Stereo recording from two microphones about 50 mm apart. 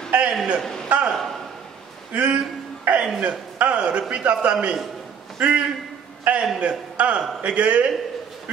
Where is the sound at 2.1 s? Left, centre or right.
Right.